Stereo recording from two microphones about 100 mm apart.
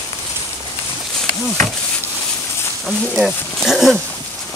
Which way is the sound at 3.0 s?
Centre (ahead or behind).